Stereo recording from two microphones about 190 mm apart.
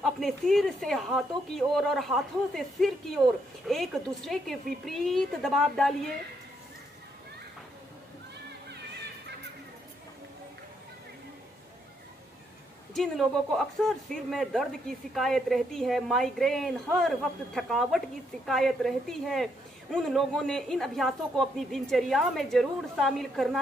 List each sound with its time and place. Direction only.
0.0 s speech: centre (ahead or behind)
12.9 s speech: centre (ahead or behind)